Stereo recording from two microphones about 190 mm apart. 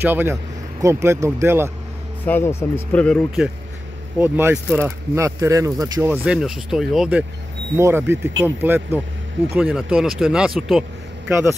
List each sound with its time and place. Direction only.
0.0 s speech: 10° right (ahead or behind)
2.2 s speech: 10° left (ahead or behind)
4.2 s speech: 10° right (ahead or behind)
6.2 s a man's voice: 5° right (ahead or behind)